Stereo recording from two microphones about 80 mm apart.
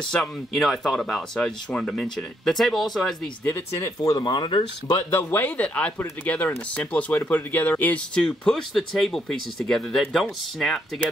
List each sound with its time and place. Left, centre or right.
0.0 s speech: centre
3.7 s speech: left
4.2 s speech: left
5.3 s speech: left
8.1 s speech: centre